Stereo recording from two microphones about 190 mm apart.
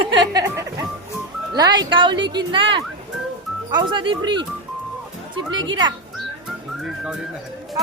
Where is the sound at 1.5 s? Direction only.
20° right (ahead or behind).